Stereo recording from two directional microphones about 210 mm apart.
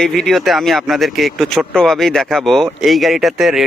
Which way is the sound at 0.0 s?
Centre (ahead or behind).